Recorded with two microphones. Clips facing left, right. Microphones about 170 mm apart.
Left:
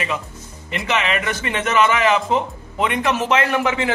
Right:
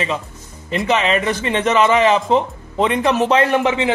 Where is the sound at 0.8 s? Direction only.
30° right (ahead or behind).